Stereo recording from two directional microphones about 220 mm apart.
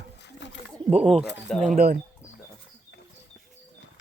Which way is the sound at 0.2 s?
55° left (ahead or behind).